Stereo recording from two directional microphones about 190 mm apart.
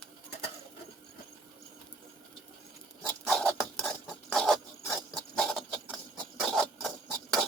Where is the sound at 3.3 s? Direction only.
5° left (ahead or behind).